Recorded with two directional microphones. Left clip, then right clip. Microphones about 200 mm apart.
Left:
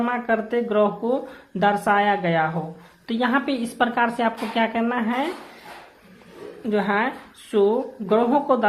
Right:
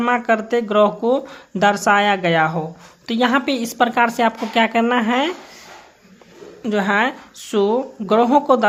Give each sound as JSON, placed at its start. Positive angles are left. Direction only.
{"t": 0.0, "sound": "speech", "side_deg": -40}
{"t": 6.7, "sound": "speech", "side_deg": -35}